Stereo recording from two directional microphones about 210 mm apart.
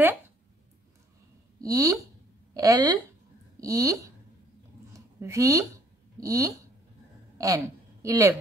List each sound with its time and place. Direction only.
1.6 s speech: 15° right (ahead or behind)
4.9 s a sound: 15° right (ahead or behind)
6.1 s a woman's voice: 15° right (ahead or behind)